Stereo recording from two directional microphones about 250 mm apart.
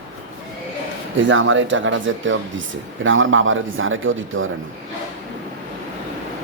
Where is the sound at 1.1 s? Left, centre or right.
Right.